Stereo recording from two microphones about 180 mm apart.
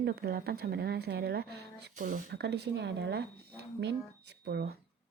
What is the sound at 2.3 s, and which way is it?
Speech, 65° right (ahead or behind).